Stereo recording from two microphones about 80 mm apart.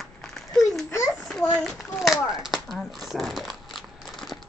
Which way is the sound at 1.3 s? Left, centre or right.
Centre.